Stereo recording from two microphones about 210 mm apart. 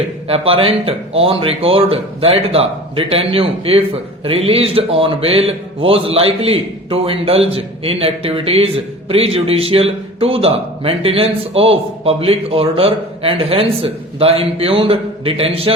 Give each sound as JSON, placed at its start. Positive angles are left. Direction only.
{"t": 0.3, "sound": "a man's voice", "side_deg": -25}